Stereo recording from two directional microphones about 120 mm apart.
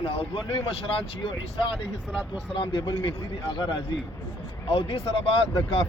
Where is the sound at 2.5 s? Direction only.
45° left (ahead or behind).